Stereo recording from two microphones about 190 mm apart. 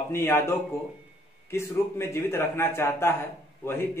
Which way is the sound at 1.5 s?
15° left (ahead or behind).